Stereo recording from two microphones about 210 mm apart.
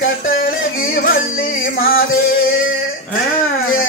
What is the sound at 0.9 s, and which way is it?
Music, 45° left (ahead or behind).